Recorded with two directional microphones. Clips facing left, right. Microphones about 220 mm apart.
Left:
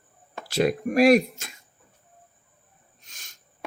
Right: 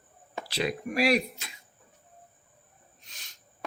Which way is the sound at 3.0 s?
45° left (ahead or behind).